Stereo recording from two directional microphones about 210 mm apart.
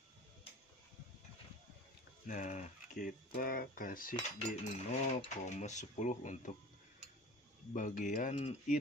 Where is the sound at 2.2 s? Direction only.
35° left (ahead or behind).